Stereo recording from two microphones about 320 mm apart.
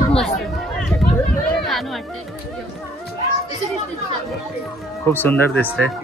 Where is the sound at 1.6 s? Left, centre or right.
Centre.